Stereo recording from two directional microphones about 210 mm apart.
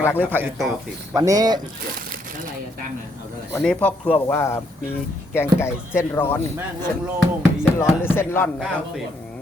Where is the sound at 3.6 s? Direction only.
5° left (ahead or behind).